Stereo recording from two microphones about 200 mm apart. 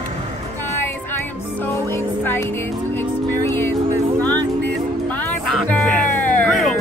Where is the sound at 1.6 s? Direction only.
10° left (ahead or behind).